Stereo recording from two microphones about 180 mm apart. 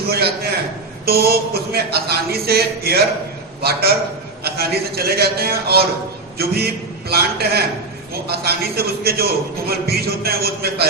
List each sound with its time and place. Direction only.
0.1 s a man's voice: 60° right (ahead or behind)